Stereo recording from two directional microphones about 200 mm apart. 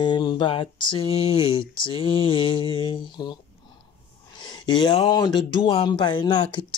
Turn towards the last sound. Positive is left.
turn(degrees=20)  # may be behind; listen again after turning